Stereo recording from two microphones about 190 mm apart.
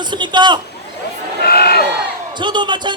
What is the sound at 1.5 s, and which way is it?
Speech, 55° left (ahead or behind).